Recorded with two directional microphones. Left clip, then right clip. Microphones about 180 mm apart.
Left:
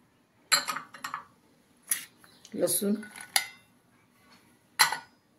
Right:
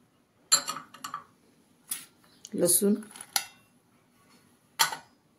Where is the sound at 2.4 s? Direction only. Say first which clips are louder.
Right 2 dB; 65° right (ahead or behind).